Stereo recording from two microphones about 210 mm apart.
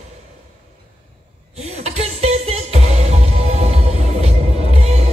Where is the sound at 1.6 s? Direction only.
30° right (ahead or behind).